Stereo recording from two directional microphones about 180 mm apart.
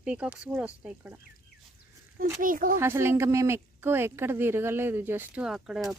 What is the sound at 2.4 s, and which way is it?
Speech, 50° right (ahead or behind).